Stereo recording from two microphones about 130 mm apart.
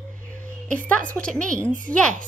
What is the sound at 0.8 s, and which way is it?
Speech, 10° left (ahead or behind).